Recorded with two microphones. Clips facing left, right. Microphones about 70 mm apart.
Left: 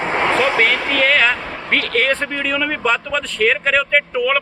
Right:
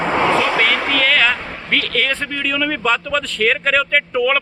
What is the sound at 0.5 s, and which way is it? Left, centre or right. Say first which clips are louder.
Speech: even; left.